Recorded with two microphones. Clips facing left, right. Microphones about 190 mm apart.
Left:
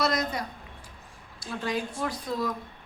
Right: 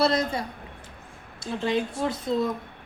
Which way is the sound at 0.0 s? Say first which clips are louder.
Right 4 dB; 30° right (ahead or behind).